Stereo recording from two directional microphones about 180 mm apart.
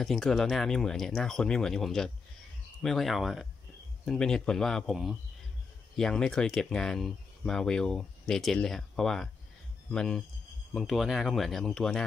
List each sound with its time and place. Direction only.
0.0 s speech: centre (ahead or behind)